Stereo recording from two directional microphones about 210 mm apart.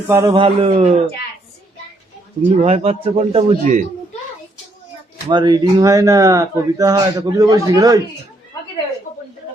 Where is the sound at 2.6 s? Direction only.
30° right (ahead or behind).